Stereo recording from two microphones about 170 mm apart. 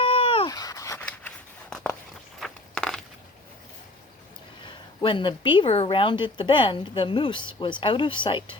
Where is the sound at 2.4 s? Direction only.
5° left (ahead or behind).